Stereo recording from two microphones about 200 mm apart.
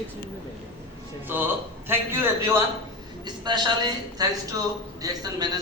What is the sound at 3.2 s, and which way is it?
A woman's voice, 20° right (ahead or behind).